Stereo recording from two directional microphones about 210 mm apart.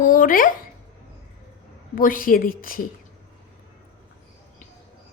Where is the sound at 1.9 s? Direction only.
40° left (ahead or behind).